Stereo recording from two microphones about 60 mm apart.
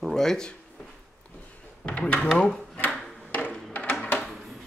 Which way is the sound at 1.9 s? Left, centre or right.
Left.